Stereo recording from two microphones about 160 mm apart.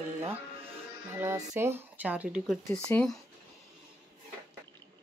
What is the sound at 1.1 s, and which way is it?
Speech, 15° right (ahead or behind).